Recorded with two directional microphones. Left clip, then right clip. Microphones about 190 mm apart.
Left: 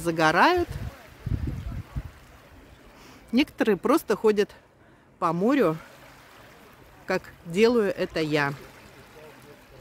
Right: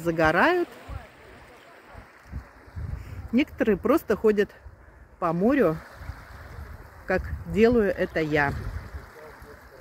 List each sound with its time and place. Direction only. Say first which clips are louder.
0.0 s speech: left 1 dB; 25° left (ahead or behind)
3.3 s speech: even; 25° left (ahead or behind)
7.1 s speech: right 1 dB; 20° left (ahead or behind)